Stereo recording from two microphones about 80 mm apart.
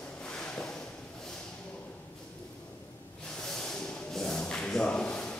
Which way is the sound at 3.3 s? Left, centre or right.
Centre.